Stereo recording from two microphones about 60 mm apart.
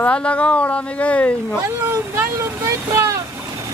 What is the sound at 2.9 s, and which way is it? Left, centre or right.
Vehicle, right.